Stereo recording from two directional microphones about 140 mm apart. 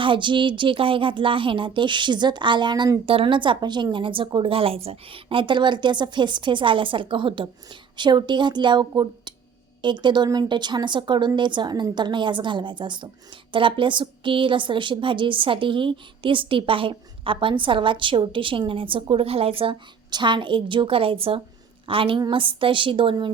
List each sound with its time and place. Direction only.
0.0 s speech: 35° right (ahead or behind)